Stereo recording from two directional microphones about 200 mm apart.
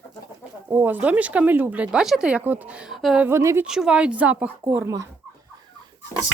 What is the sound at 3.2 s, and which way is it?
Speech, 15° right (ahead or behind).